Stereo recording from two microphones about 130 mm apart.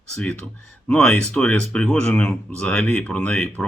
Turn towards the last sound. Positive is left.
turn(degrees=5)  # may be behind; listen again after turning